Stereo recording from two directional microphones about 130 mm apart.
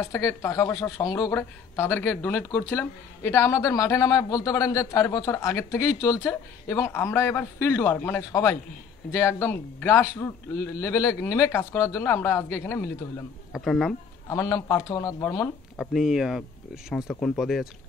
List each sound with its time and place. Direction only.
0.0 s a woman's voice: 25° left (ahead or behind)
13.5 s speech: 5° left (ahead or behind)
14.3 s a woman's voice: 25° left (ahead or behind)
15.8 s speech: centre (ahead or behind)